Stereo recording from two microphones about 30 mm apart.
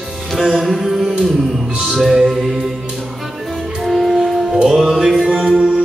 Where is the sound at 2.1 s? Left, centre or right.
Centre.